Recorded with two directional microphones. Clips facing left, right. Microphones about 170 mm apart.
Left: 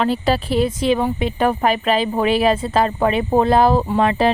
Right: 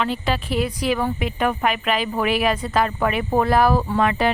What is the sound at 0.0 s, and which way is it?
Speech, 35° left (ahead or behind).